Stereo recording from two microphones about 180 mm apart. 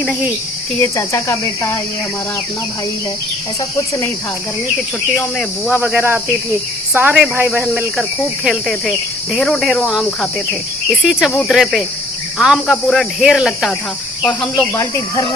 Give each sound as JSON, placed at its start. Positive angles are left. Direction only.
{"t": 0.0, "sound": "speech", "side_deg": 0}
{"t": 0.8, "sound": "speech", "side_deg": 15}
{"t": 3.8, "sound": "speech", "side_deg": 15}
{"t": 5.1, "sound": "speech", "side_deg": 0}
{"t": 5.7, "sound": "speech", "side_deg": -10}